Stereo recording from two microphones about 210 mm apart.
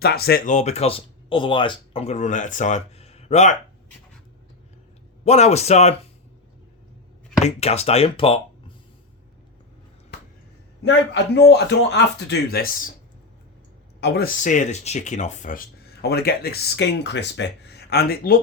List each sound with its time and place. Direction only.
0.0 s speech: 50° left (ahead or behind); by 3.6 s 35° left (ahead or behind)
5.2 s speech: 30° left (ahead or behind)
7.4 s speech: 30° left (ahead or behind)
10.8 s speech: 55° left (ahead or behind)
14.0 s speech: 50° left (ahead or behind)